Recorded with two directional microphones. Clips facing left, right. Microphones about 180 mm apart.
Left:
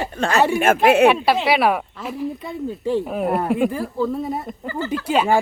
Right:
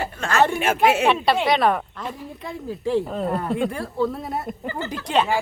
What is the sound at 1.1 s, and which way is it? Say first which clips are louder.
Speech: left 2 dB; 5° left (ahead or behind).